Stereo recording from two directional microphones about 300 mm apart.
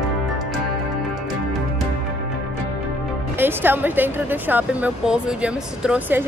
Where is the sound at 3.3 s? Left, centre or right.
Centre.